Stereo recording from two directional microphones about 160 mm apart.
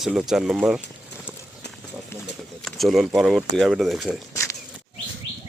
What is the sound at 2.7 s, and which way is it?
Speech, centre (ahead or behind).